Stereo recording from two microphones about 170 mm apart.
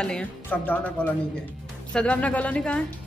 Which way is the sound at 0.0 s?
5° left (ahead or behind).